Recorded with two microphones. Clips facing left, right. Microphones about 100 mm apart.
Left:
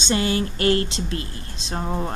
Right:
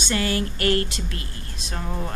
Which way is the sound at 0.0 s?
25° left (ahead or behind).